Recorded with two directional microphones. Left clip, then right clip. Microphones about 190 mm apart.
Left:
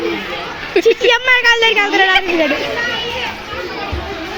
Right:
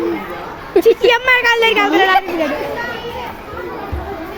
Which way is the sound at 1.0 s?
20° left (ahead or behind).